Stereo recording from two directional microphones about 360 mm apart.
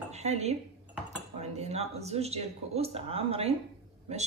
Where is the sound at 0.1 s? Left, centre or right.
Centre.